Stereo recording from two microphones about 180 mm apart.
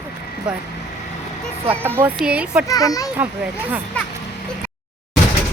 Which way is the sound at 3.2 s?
10° right (ahead or behind).